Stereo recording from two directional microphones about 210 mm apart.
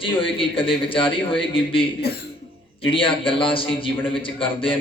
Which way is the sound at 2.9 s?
25° left (ahead or behind).